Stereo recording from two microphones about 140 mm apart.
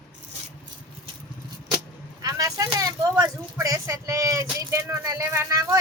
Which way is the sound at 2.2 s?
25° right (ahead or behind).